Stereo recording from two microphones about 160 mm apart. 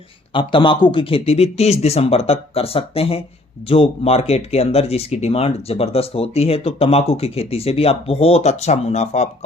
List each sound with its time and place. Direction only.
0.3 s speech: 30° left (ahead or behind)